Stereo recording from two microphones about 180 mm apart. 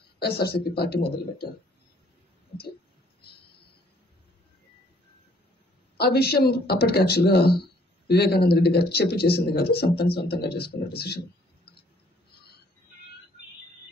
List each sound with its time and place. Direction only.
0.2 s speech: 60° left (ahead or behind)
5.9 s speech: 60° left (ahead or behind)